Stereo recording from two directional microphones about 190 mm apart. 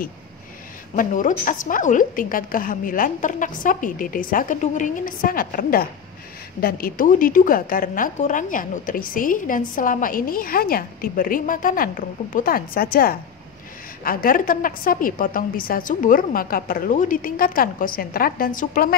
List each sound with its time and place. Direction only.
0.9 s a woman's voice: 45° left (ahead or behind)